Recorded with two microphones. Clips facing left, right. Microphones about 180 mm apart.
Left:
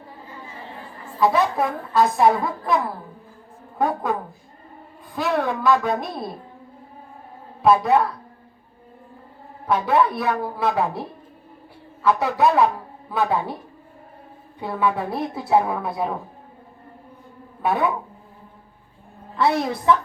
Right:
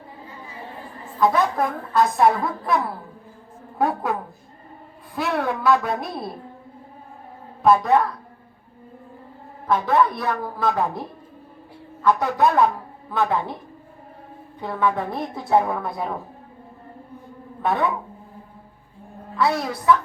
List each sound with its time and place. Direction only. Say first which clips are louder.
1.2 s a woman's voice: even; 5° left (ahead or behind)
7.6 s a woman's voice: even; 5° left (ahead or behind)
9.6 s a woman's voice: even; 10° left (ahead or behind)
12.0 s a woman's voice: even; 5° left (ahead or behind)
14.6 s a woman's voice: even; 10° left (ahead or behind)
17.6 s a woman's voice: left 1 dB; 5° left (ahead or behind)
19.4 s a woman's voice: left 2 dB; 25° left (ahead or behind)